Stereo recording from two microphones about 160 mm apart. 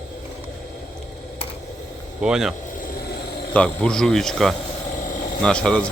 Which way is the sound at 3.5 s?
5° left (ahead or behind).